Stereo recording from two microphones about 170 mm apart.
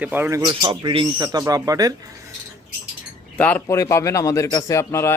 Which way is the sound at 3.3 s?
10° left (ahead or behind).